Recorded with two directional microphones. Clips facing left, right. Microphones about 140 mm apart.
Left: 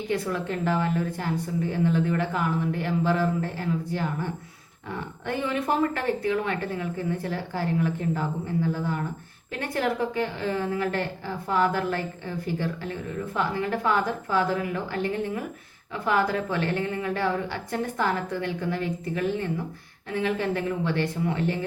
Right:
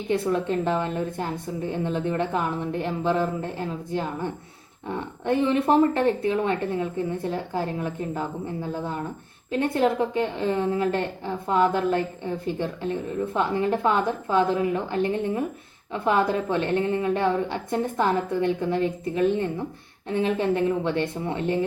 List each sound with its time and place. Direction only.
0.1 s a woman's voice: 25° right (ahead or behind)